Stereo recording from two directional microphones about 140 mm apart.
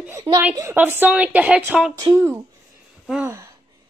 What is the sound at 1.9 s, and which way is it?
Speech, 25° right (ahead or behind).